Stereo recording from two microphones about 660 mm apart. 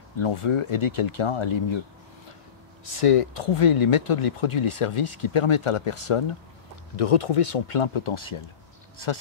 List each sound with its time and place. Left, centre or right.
0.2 s speech: left
3.0 s speech: left